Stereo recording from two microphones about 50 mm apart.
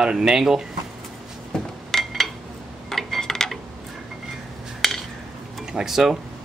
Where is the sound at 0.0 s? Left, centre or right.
Centre.